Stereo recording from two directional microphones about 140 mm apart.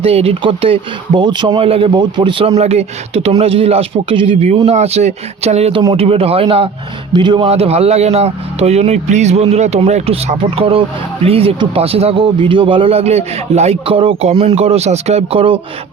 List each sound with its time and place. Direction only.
0.0 s speech: 45° right (ahead or behind)
2.6 s a man's voice: 50° right (ahead or behind); by 7.4 s 35° right (ahead or behind)
7.4 s a man's voice: 45° right (ahead or behind)